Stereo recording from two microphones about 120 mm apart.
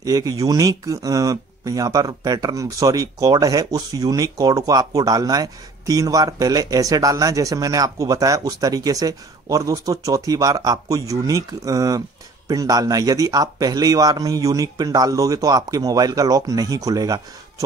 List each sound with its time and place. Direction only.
0.0 s speech: 30° right (ahead or behind)